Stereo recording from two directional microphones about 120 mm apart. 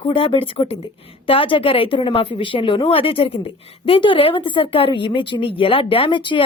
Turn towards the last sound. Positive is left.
turn(degrees=40)  # may be behind; listen again after turning